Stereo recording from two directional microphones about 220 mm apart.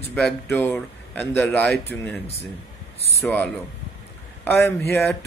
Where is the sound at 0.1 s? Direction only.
10° left (ahead or behind).